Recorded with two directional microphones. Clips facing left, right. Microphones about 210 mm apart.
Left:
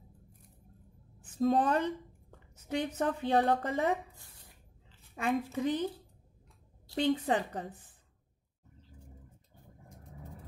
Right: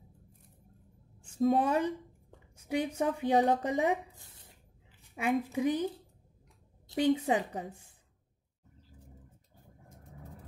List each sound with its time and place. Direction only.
1.4 s a woman's voice: 5° right (ahead or behind)
4.1 s a sound: 20° right (ahead or behind)
5.1 s a woman's voice: 10° right (ahead or behind)
7.0 s a woman's voice: 10° right (ahead or behind)